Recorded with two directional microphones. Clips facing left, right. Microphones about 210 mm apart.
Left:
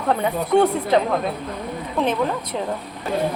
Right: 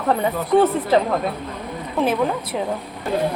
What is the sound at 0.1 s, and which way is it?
A woman's voice, centre (ahead or behind).